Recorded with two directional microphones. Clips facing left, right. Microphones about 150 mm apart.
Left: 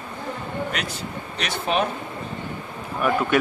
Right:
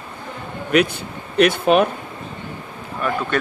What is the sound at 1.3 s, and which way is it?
Speech, 55° right (ahead or behind).